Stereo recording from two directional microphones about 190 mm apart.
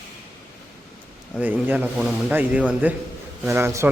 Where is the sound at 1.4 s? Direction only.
10° right (ahead or behind).